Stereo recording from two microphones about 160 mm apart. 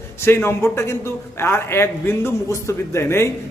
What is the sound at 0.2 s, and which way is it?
A man's voice, 15° left (ahead or behind).